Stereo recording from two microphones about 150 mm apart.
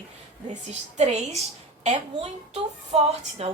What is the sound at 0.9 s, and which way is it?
A woman's voice, 45° right (ahead or behind).